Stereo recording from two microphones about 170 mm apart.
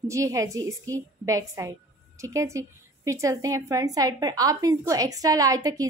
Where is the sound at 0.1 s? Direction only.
20° right (ahead or behind).